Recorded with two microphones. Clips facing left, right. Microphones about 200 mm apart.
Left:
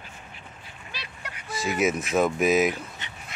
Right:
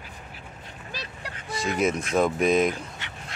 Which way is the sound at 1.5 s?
5° left (ahead or behind).